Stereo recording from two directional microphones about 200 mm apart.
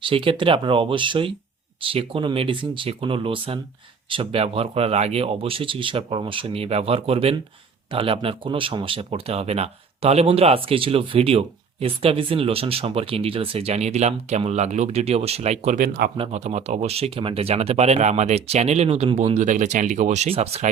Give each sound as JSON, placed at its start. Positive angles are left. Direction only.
{"t": 0.0, "sound": "speech", "side_deg": -25}
{"t": 16.1, "sound": "speech", "side_deg": -30}